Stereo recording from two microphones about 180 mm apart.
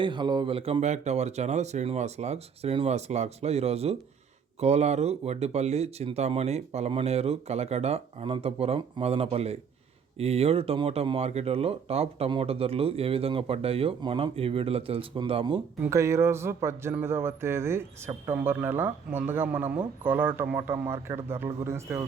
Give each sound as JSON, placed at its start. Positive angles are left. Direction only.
{"t": 0.0, "sound": "speech", "side_deg": -25}
{"t": 15.8, "sound": "speech", "side_deg": -15}